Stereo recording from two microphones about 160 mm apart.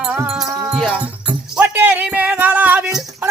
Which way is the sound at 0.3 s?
5° right (ahead or behind).